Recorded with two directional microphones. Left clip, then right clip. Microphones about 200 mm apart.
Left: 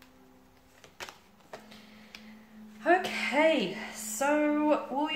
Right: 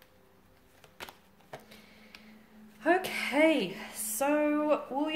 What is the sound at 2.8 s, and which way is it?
A woman's voice, 50° right (ahead or behind).